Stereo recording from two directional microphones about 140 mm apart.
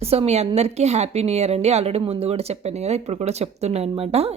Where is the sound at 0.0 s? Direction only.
45° right (ahead or behind).